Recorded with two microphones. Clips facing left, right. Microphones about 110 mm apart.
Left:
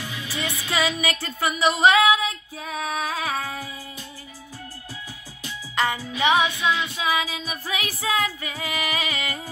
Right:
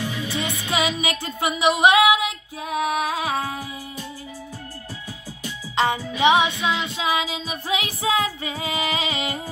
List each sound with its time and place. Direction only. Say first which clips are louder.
0.3 s music: left 1 dB; 20° right (ahead or behind)
5.8 s music: right 3 dB; 20° right (ahead or behind)